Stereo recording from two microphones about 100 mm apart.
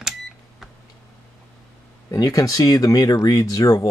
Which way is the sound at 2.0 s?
35° left (ahead or behind).